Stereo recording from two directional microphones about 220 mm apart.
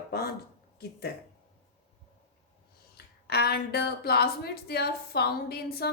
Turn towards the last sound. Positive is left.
turn(degrees=45)  # may be behind; listen again after turning